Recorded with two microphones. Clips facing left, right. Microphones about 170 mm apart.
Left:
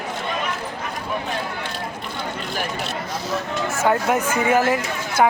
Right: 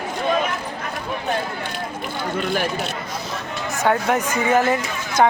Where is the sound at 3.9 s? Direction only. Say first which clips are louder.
Right 1 dB; 5° left (ahead or behind).